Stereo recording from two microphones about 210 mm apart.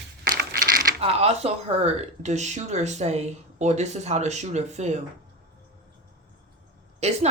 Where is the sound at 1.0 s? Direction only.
30° right (ahead or behind).